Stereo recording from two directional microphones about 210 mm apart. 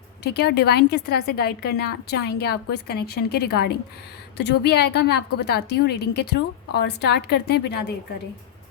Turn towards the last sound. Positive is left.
turn(degrees=50)  # may be behind; listen again after turning